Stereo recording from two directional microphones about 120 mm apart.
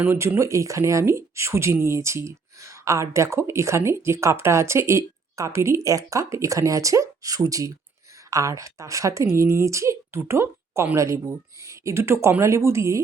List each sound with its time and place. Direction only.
0.1 s speech: 20° right (ahead or behind)